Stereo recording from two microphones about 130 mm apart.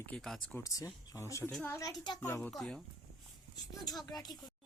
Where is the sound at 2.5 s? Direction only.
Centre (ahead or behind).